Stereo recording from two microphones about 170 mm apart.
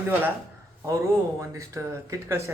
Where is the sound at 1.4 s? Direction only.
20° right (ahead or behind).